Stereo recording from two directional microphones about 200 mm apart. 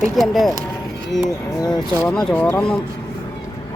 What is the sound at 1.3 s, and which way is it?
Speech, 15° left (ahead or behind).